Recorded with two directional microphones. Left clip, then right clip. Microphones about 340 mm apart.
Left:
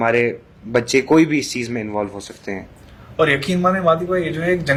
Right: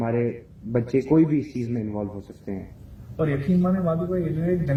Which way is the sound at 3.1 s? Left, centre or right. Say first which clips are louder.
Left 9 dB; centre.